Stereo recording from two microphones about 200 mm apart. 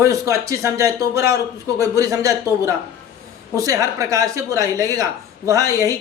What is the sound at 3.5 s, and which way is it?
Speech, 15° right (ahead or behind).